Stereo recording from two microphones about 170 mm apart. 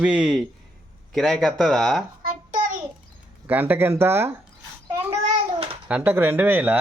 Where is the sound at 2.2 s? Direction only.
55° right (ahead or behind).